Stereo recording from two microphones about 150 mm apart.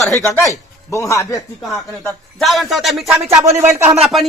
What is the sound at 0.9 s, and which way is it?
Speech, 20° left (ahead or behind).